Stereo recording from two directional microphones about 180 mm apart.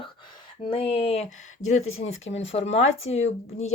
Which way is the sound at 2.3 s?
35° left (ahead or behind).